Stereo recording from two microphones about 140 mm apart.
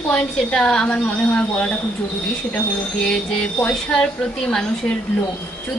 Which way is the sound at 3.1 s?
5° left (ahead or behind).